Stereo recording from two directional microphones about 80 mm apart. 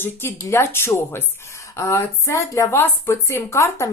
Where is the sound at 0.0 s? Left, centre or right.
Left.